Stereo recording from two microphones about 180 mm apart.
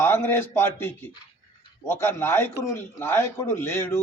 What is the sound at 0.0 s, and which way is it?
A man's voice, 10° left (ahead or behind).